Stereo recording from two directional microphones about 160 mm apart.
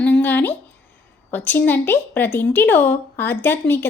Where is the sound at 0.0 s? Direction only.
10° left (ahead or behind).